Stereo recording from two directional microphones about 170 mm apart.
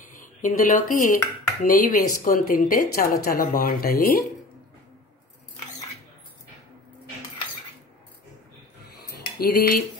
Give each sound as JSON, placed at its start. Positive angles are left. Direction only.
{"t": 0.0, "sound": "speech", "side_deg": 50}
{"t": 9.1, "sound": "dishes", "side_deg": 65}